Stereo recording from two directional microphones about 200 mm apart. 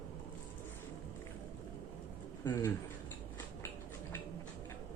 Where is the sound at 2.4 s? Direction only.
15° left (ahead or behind).